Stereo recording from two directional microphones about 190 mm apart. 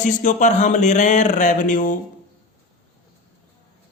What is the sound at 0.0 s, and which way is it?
Speech, 40° left (ahead or behind).